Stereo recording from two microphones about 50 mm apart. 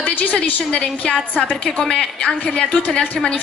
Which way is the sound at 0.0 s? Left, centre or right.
Left.